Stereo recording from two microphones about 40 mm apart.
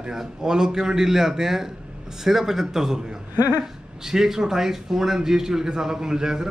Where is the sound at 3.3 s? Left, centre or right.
Right.